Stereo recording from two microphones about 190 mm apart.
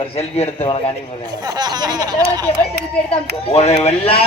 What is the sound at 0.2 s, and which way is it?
Speech, 35° left (ahead or behind).